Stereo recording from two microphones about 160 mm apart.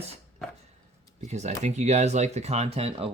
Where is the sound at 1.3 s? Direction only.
45° right (ahead or behind).